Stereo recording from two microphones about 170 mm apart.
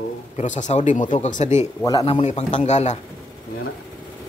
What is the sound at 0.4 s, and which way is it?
Speech, 45° left (ahead or behind).